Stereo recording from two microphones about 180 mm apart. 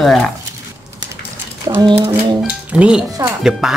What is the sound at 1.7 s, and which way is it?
Speech, 25° right (ahead or behind).